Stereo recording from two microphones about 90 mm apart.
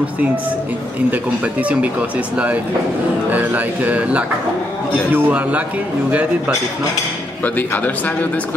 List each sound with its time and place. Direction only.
1.1 s speech: 15° right (ahead or behind)
7.4 s a man's voice: 20° left (ahead or behind)